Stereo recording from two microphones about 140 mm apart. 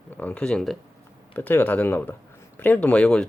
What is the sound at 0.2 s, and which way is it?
Speech, 10° left (ahead or behind).